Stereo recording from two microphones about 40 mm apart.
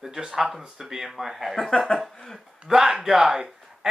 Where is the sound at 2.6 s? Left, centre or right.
Centre.